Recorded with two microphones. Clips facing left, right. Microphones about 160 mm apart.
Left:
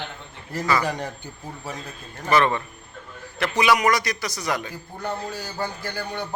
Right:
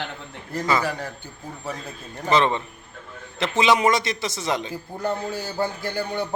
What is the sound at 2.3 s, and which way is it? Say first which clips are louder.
A man's voice: even; 20° right (ahead or behind).